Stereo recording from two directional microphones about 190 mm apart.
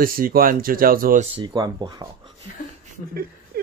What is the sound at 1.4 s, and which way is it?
Speech, 20° right (ahead or behind).